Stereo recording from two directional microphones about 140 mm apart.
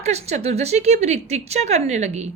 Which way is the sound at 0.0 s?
50° right (ahead or behind).